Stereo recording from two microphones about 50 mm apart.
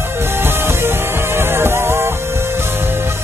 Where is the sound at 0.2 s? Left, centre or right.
Right.